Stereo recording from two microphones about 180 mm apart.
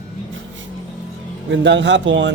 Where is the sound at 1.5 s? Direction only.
80° right.